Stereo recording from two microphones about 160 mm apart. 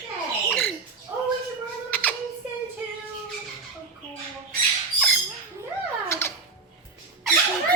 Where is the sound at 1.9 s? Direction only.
10° left (ahead or behind).